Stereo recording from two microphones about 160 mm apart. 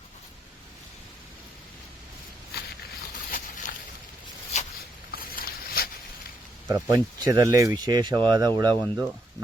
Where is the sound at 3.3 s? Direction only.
55° left (ahead or behind).